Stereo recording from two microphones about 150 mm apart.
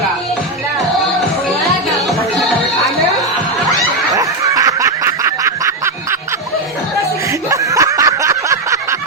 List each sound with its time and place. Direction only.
4.1 s snicker: 20° right (ahead or behind)
7.5 s snicker: 20° right (ahead or behind)